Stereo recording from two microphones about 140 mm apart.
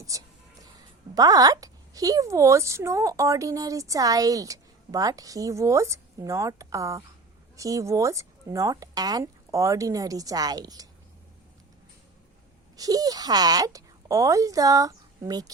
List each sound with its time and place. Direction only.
0.1 s a woman's voice: 25° right (ahead or behind)
12.7 s a woman's voice: 25° right (ahead or behind)